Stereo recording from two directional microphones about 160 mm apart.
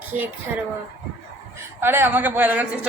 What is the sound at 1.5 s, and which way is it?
A woman's voice, 15° right (ahead or behind).